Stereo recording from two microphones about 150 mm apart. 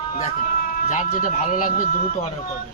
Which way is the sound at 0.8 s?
55° left (ahead or behind).